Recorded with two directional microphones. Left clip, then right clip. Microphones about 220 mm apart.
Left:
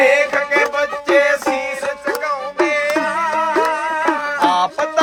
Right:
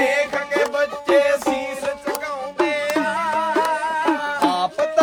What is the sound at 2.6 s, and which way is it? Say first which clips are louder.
Music: left 3 dB; 5° right (ahead or behind).